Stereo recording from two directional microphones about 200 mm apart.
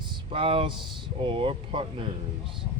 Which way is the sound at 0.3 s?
25° right (ahead or behind).